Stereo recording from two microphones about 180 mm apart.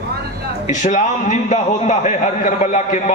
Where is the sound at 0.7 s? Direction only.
45° left (ahead or behind).